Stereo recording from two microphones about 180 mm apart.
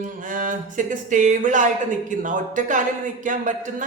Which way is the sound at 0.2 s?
45° right (ahead or behind).